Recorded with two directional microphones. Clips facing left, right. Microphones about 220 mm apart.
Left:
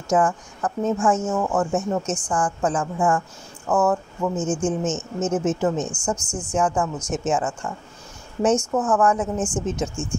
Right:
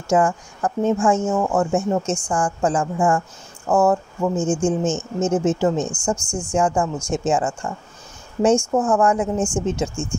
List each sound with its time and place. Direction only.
0.1 s a woman's voice: 25° right (ahead or behind)
6.2 s a woman's voice: 10° right (ahead or behind)
6.5 s a woman's voice: 30° right (ahead or behind)
8.7 s a woman's voice: 30° right (ahead or behind)
9.2 s a woman's voice: 10° right (ahead or behind)